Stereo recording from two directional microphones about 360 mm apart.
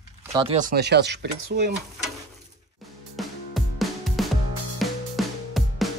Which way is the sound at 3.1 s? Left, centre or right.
Centre.